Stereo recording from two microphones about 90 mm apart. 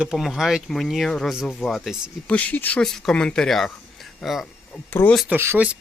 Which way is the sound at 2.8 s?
5° left (ahead or behind).